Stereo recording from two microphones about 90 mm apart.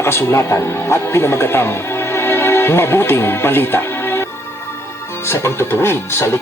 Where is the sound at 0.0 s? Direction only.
30° left (ahead or behind).